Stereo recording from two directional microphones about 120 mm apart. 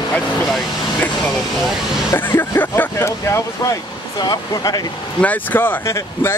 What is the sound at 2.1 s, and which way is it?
Speech, 15° left (ahead or behind).